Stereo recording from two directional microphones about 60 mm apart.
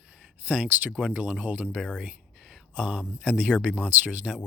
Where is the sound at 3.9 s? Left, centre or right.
Right.